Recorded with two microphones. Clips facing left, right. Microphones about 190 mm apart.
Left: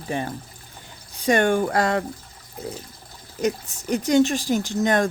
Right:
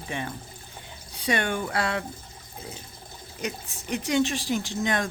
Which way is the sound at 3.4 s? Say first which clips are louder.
Left 9 dB; 40° left (ahead or behind).